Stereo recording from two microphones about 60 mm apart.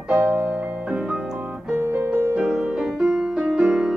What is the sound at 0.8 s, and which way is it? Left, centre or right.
Piano, centre.